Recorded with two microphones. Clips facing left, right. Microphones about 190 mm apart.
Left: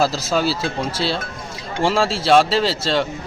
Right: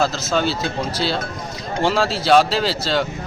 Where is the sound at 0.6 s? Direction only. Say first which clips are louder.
Even; 25° left (ahead or behind).